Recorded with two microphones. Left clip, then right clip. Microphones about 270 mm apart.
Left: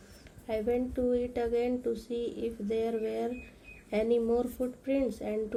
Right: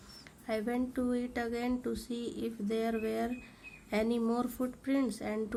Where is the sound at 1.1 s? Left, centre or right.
Right.